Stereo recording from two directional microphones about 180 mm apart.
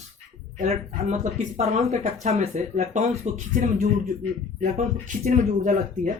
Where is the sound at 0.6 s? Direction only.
35° right (ahead or behind).